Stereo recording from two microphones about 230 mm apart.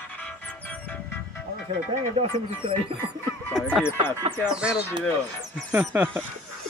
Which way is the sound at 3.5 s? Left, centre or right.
Centre.